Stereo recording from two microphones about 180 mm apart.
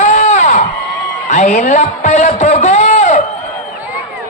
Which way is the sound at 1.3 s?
45° left (ahead or behind).